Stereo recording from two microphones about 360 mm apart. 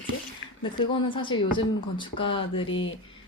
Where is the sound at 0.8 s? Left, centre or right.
Centre.